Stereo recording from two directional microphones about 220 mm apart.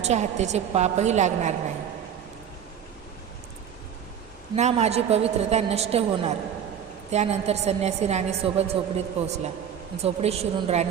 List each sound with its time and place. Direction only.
0.0 s a woman's voice: 30° right (ahead or behind)
4.5 s a woman's voice: 30° right (ahead or behind)